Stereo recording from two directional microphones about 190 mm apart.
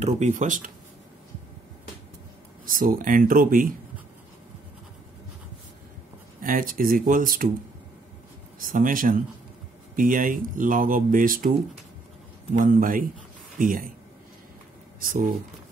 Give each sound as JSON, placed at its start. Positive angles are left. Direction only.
{"t": 0.0, "sound": "speech", "side_deg": -40}
{"t": 2.6, "sound": "speech", "side_deg": -45}
{"t": 6.4, "sound": "speech", "side_deg": -50}
{"t": 8.5, "sound": "speech", "side_deg": -45}